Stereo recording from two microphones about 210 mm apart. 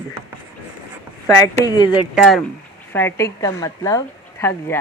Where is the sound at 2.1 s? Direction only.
Centre (ahead or behind).